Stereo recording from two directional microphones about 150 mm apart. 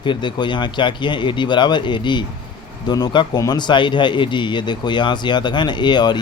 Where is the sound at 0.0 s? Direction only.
30° left (ahead or behind).